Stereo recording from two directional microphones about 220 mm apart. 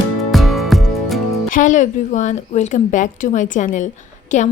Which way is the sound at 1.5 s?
35° left (ahead or behind).